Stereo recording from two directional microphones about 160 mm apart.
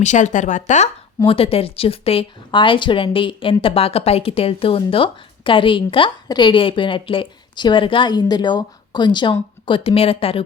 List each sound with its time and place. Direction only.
0.0 s speech: 50° left (ahead or behind)
1.2 s speech: 35° left (ahead or behind)